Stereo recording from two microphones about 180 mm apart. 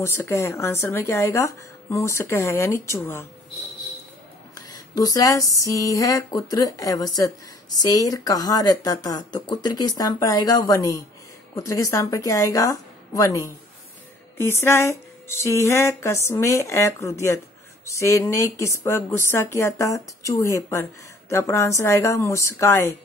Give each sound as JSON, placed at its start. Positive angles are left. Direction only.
{"t": 0.0, "sound": "speech", "side_deg": 15}
{"t": 4.6, "sound": "a sound", "side_deg": 20}
{"t": 6.5, "sound": "a woman's voice", "side_deg": 20}